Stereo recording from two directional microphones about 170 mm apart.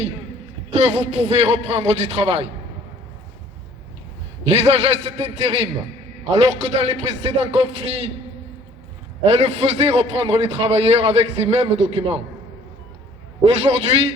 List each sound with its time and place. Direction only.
0.7 s a man's voice: 40° right (ahead or behind)
4.4 s a man's voice: 40° right (ahead or behind)
9.3 s a man's voice: 40° right (ahead or behind)
13.4 s a man's voice: 40° right (ahead or behind)